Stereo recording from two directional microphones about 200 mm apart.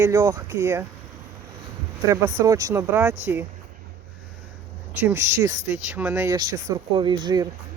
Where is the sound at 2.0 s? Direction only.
15° right (ahead or behind).